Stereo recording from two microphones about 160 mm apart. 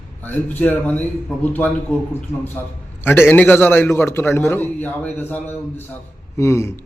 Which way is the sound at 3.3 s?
10° left (ahead or behind).